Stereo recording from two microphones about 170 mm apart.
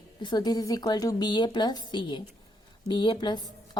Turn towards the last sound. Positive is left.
turn(degrees=25)  # may be behind; listen again after turning